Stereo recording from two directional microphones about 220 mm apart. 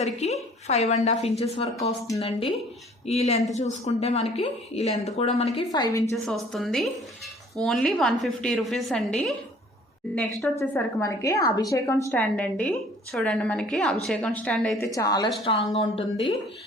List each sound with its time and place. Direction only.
0.0 s a woman's voice: 30° left (ahead or behind)
5.7 s a woman's voice: 15° left (ahead or behind)
6.2 s a woman's voice: centre (ahead or behind)
10.6 s a woman's voice: 15° left (ahead or behind)
14.9 s a woman's voice: 15° left (ahead or behind)